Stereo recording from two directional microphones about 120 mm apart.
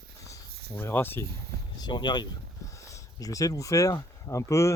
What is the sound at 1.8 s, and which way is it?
Speech, 40° left (ahead or behind).